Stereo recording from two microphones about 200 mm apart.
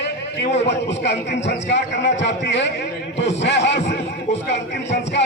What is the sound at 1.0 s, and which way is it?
A man's voice, 60° left (ahead or behind).